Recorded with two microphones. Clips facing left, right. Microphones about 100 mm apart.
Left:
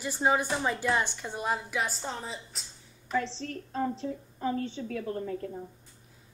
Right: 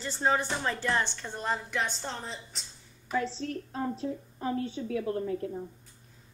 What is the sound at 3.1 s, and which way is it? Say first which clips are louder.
A woman's voice: even; 10° right (ahead or behind).